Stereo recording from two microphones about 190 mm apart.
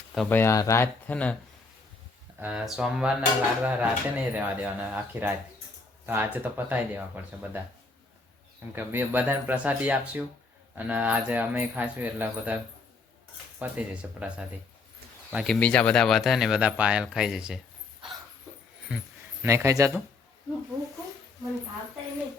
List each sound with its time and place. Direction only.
0.3 s speech: 10° left (ahead or behind)
2.4 s speech: 5° right (ahead or behind)
8.7 s speech: 10° right (ahead or behind)
13.6 s speech: 5° right (ahead or behind)
15.5 s speech: 5° left (ahead or behind)
18.9 s speech: 5° right (ahead or behind)